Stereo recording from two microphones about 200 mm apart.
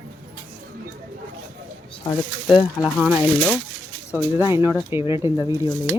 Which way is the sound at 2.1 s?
25° left (ahead or behind).